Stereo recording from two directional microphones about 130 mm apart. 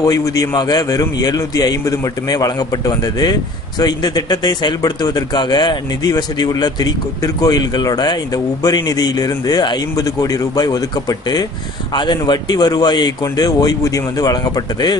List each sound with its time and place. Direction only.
0.0 s a man's voice: 25° left (ahead or behind)